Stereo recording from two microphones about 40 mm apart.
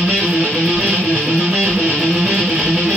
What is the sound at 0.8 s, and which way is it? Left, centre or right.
Music, right.